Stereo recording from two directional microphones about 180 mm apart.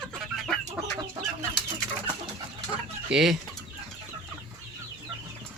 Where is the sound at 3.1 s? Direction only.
Centre (ahead or behind).